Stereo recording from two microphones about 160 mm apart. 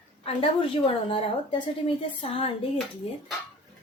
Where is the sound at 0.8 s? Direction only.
35° left (ahead or behind).